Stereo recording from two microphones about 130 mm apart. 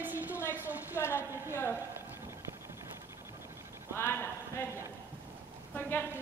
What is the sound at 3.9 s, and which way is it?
Speech, 20° left (ahead or behind).